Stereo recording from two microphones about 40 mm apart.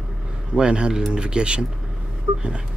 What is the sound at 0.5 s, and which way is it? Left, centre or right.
Speech, right.